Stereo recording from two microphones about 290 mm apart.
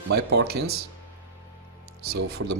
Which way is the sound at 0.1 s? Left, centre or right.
Right.